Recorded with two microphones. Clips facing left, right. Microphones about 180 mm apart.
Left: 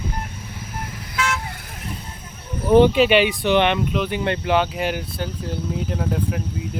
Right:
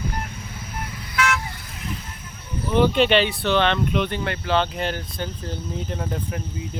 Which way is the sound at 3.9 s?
Centre (ahead or behind).